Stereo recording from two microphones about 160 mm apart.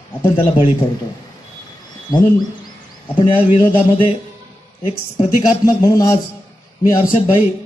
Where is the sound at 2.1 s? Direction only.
25° left (ahead or behind).